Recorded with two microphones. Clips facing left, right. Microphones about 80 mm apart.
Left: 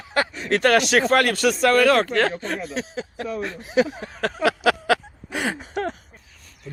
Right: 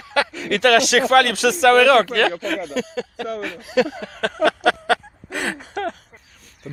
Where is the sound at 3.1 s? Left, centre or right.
Right.